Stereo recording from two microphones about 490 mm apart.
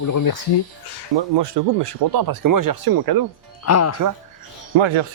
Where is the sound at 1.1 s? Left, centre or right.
Right.